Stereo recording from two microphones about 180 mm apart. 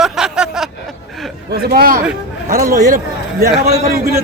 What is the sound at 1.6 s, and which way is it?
A man's voice, 55° right (ahead or behind).